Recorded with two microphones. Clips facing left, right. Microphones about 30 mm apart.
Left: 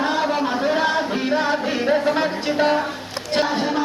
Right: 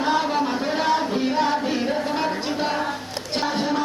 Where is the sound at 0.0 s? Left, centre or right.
Left.